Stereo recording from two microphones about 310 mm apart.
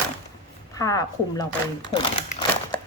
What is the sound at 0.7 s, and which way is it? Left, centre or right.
Speech, centre.